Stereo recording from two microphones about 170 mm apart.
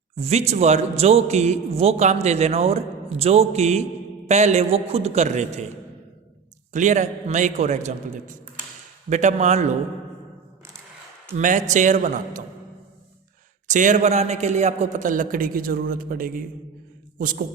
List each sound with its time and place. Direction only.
0.2 s a man's voice: 40° right (ahead or behind)
6.7 s a man's voice: 45° right (ahead or behind)
11.3 s a man's voice: 45° right (ahead or behind)
13.7 s a man's voice: 45° right (ahead or behind)